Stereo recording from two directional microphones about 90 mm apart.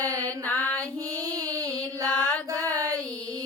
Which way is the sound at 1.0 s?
40° right (ahead or behind).